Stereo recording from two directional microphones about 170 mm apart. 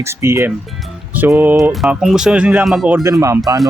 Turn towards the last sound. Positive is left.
turn(degrees=-20)  # may be behind; listen again after turning